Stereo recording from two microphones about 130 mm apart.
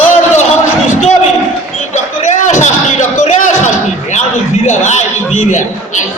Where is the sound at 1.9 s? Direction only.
70° left (ahead or behind).